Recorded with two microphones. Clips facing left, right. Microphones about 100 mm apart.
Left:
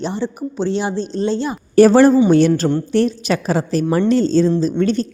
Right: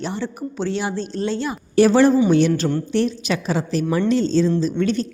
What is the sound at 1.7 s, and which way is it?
A woman's voice, 45° left (ahead or behind).